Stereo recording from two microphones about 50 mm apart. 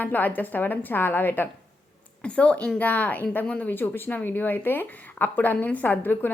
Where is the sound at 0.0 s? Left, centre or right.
Left.